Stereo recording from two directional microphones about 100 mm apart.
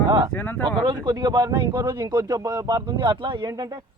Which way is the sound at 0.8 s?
50° right (ahead or behind).